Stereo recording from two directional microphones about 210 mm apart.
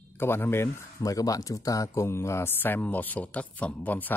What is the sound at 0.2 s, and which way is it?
Speech, 10° left (ahead or behind).